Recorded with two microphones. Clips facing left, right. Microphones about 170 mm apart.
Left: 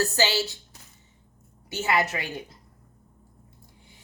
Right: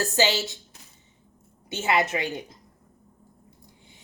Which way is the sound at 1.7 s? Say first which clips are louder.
Right 1 dB; 25° right (ahead or behind).